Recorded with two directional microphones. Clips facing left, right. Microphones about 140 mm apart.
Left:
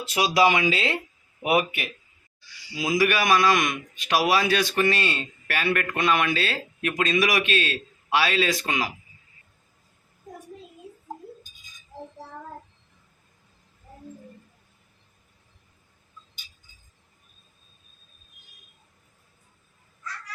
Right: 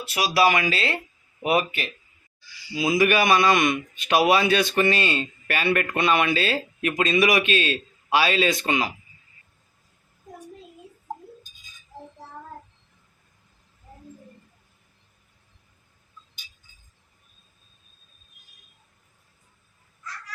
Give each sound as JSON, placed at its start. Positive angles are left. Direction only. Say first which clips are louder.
{"t": 0.1, "sound": "speech", "louder": "even", "side_deg": 20}
{"t": 2.7, "sound": "a man's voice", "louder": "right 3 dB", "side_deg": 0}